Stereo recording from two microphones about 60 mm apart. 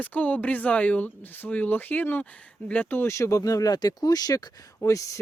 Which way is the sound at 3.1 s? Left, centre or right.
Left.